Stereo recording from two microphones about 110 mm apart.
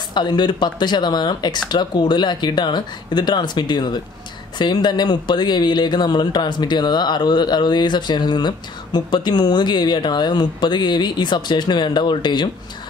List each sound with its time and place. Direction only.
0.1 s speech: 40° left (ahead or behind)